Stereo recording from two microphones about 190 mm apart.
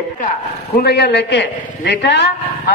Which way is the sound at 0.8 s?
60° left (ahead or behind).